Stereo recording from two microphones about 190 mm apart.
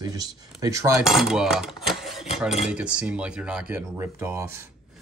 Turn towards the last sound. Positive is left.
turn(degrees=-15)  # may be behind; listen again after turning